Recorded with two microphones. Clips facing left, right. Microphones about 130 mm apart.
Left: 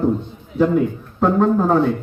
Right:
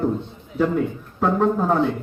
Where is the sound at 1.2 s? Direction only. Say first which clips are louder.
Left 4 dB; centre (ahead or behind).